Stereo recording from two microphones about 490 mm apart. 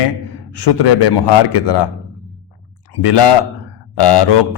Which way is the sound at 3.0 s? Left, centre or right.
Left.